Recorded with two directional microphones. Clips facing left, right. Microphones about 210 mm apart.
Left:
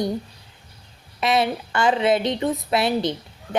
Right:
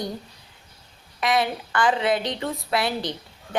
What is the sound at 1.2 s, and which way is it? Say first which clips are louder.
Speech: left 2 dB; 25° left (ahead or behind).